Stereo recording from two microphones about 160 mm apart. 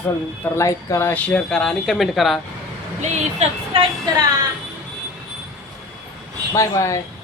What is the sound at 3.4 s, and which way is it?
Speech, 45° right (ahead or behind).